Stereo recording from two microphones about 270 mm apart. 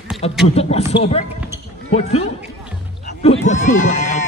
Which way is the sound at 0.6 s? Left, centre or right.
Left.